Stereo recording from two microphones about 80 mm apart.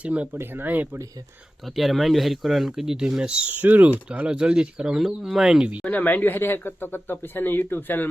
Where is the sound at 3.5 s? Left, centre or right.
Right.